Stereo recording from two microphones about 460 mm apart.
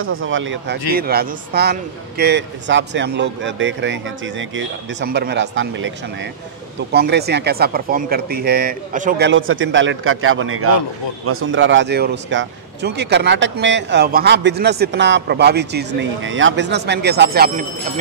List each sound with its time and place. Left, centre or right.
0.0 s speech: right